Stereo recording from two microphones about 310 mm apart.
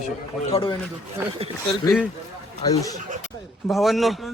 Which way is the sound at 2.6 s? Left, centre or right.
Centre.